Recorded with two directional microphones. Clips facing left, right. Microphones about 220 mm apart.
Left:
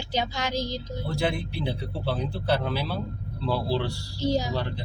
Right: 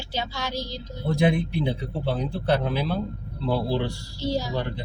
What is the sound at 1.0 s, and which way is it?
A man's voice, 20° right (ahead or behind).